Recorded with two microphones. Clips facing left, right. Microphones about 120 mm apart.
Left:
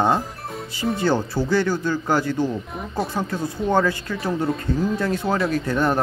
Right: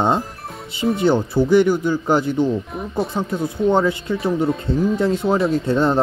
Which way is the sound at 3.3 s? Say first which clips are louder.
Right 4 dB; 20° right (ahead or behind).